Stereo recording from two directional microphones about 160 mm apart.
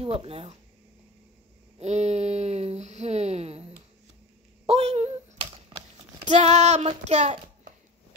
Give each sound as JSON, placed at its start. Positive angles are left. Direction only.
{"t": 0.0, "sound": "speech", "side_deg": -35}
{"t": 1.8, "sound": "speech", "side_deg": -45}
{"t": 4.6, "sound": "a sound", "side_deg": -40}
{"t": 6.2, "sound": "a child's voice", "side_deg": -45}